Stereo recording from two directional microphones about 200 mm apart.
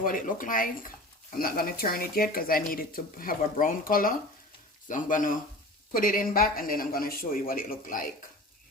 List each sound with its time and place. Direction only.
0.0 s speech: 45° left (ahead or behind)